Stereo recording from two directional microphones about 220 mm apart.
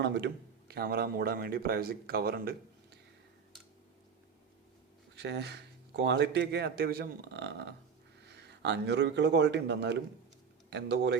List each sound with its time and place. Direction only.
0.0 s a man's voice: 50° right (ahead or behind)
5.1 s a man's voice: 50° right (ahead or behind)